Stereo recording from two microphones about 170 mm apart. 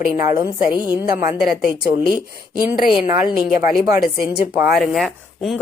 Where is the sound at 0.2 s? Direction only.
15° right (ahead or behind).